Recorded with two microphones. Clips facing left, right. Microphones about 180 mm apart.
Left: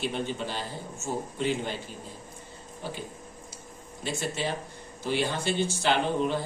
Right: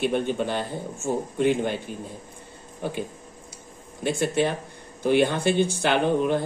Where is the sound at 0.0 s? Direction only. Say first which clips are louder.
Right 7 dB; 55° right (ahead or behind).